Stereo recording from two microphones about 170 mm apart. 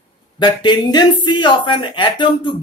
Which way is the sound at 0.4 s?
25° left (ahead or behind).